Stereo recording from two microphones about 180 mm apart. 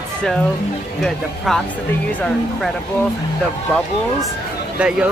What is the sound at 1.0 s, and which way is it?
Speech, centre (ahead or behind).